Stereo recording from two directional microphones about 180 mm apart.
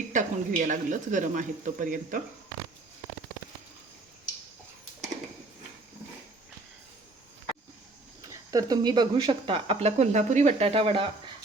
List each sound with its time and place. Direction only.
0.1 s speech: 45° right (ahead or behind)
8.3 s speech: 20° right (ahead or behind)